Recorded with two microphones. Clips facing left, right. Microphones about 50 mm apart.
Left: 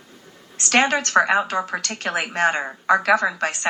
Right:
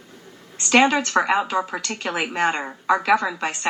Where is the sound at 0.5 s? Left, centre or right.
Left.